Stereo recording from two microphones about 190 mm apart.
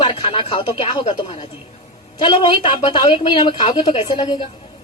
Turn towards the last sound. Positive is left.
turn(degrees=25)  # may be behind; listen again after turning